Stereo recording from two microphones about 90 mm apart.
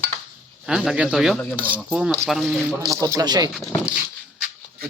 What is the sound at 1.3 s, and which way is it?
Speech, 20° left (ahead or behind).